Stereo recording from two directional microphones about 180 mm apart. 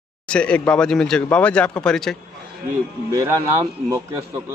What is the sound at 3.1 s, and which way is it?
Speech, 15° right (ahead or behind).